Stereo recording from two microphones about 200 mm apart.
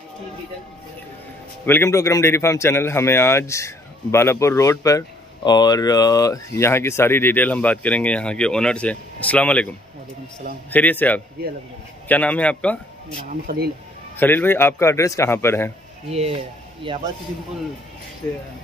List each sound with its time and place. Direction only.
1.7 s speech: 15° left (ahead or behind)
10.7 s speech: 10° left (ahead or behind)
13.1 s speech: 45° right (ahead or behind)
14.1 s speech: 10° left (ahead or behind)
16.1 s a man's voice: 30° right (ahead or behind)